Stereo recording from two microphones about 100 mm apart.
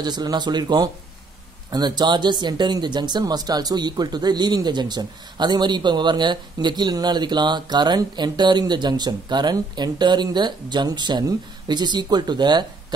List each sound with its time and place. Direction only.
0.0 s speech: 45° right (ahead or behind)